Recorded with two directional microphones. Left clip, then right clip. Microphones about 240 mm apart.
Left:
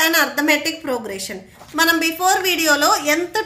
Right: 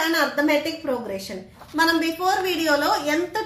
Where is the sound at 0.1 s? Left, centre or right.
Left.